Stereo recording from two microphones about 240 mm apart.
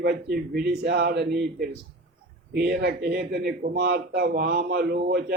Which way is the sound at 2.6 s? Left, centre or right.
Right.